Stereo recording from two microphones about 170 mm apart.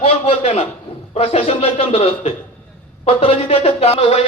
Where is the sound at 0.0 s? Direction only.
35° left (ahead or behind).